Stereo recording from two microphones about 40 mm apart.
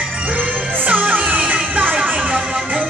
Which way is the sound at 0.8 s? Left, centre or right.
Right.